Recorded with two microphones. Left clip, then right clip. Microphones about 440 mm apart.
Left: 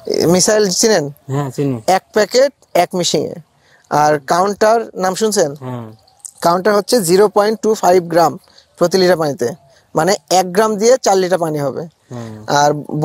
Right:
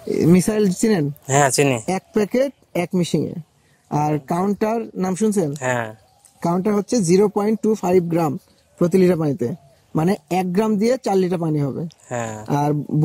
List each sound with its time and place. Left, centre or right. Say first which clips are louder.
0.1 s speech: left 6 dB; left
1.2 s speech: right 4 dB; right
1.9 s speech: left 9 dB; left
3.9 s speech: left 9 dB; left
6.7 s speech: left 6 dB; left
9.9 s speech: left 8 dB; left